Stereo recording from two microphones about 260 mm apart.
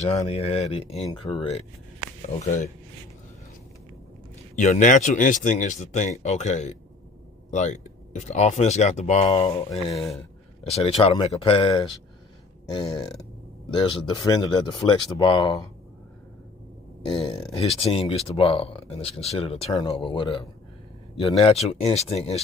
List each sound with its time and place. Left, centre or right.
0.0 s speech: left
4.6 s speech: left
17.1 s speech: centre